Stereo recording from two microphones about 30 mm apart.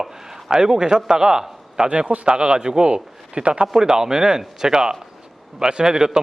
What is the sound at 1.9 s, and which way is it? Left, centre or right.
Speech, right.